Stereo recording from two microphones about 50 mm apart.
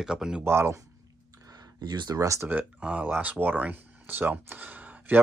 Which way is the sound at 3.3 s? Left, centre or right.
Right.